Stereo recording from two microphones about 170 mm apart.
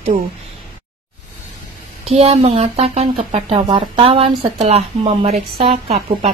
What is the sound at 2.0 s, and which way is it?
Speech, 35° right (ahead or behind).